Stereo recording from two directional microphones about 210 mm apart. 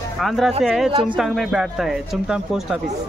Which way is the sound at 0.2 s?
Centre (ahead or behind).